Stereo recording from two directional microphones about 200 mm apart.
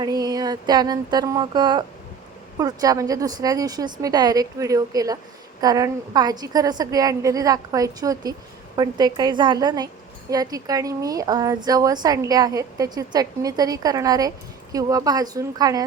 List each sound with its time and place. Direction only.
0.0 s a woman's voice: 20° right (ahead or behind)